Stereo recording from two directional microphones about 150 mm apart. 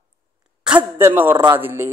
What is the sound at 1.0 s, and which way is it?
Speech, 15° right (ahead or behind).